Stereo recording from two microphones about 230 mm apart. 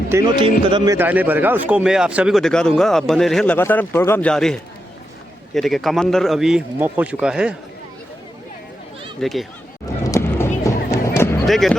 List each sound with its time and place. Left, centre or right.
0.1 s speech: centre
0.9 s speech: centre
9.2 s speech: centre
10.1 s run: centre
11.4 s speech: centre